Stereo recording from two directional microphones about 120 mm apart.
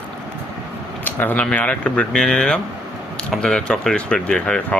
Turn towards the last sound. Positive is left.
turn(degrees=10)  # may be behind; listen again after turning